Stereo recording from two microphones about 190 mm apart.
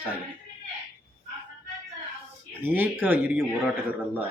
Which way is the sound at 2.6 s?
10° right (ahead or behind).